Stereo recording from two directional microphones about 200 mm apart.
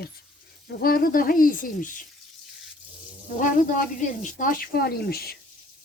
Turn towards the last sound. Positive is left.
turn(degrees=50)  # may be behind; listen again after turning